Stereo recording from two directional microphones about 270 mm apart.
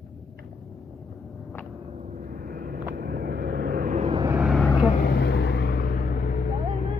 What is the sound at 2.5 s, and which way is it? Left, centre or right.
Vehicle, right.